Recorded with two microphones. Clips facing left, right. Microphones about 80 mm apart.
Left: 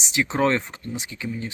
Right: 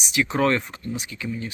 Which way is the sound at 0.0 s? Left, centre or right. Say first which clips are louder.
Even; left.